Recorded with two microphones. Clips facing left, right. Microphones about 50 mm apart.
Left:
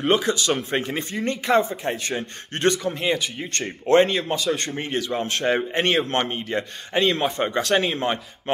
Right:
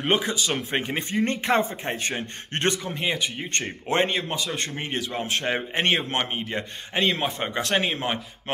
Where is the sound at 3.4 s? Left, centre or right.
Right.